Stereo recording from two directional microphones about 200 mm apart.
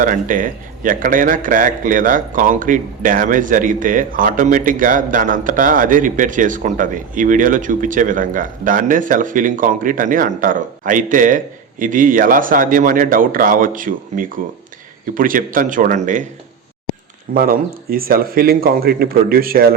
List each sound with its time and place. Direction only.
0.0 s speech: 40° right (ahead or behind)
17.3 s speech: 45° right (ahead or behind)